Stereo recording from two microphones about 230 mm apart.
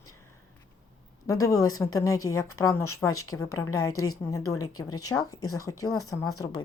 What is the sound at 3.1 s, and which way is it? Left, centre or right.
Speech, left.